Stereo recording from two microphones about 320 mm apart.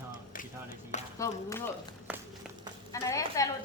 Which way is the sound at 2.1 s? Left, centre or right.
Centre.